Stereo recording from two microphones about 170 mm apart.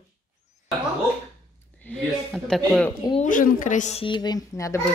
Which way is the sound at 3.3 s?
50° left (ahead or behind).